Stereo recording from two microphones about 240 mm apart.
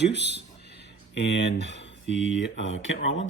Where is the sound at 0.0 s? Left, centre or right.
Left.